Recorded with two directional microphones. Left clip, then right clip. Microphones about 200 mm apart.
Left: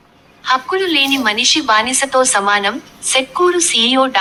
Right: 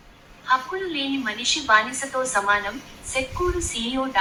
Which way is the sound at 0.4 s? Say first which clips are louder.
Left 8 dB; 60° left (ahead or behind).